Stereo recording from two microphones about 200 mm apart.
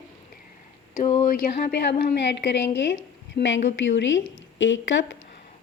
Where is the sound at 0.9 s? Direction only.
35° left (ahead or behind); by 5.2 s 70° left (ahead or behind).